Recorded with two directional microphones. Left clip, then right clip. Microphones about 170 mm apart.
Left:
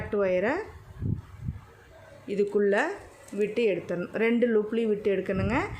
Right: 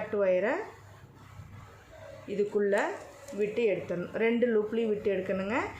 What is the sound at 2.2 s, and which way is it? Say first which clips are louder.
Speech: left 3 dB; 45° left (ahead or behind).